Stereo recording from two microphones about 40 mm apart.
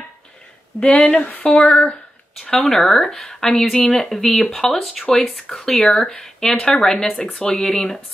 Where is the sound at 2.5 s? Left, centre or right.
Centre.